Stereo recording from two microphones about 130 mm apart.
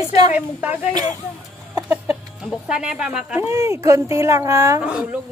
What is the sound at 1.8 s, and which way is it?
Chicken, 10° right (ahead or behind).